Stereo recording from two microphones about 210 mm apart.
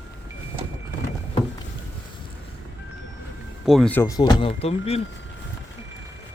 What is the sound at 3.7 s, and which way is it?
Speech, centre (ahead or behind).